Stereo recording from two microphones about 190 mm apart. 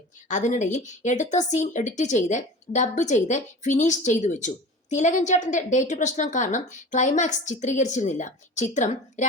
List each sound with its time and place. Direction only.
0.3 s speech: 40° left (ahead or behind)